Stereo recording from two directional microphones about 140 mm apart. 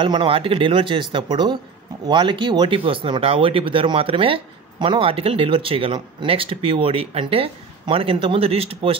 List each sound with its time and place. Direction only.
0.0 s speech: 35° right (ahead or behind)